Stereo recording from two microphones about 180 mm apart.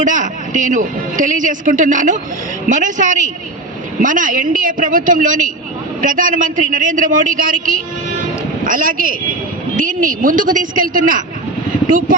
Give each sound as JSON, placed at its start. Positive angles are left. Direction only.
{"t": 0.0, "sound": "a man's voice", "side_deg": -45}